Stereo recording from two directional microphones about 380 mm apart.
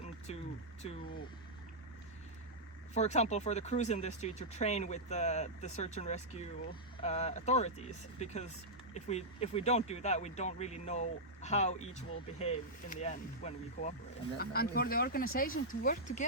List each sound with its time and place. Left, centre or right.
0.3 s speech: centre
2.9 s speech: centre